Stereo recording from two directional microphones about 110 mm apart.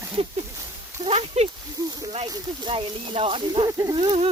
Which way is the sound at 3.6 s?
30° right (ahead or behind).